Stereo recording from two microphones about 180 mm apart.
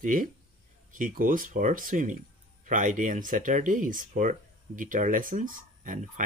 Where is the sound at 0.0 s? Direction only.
45° right (ahead or behind).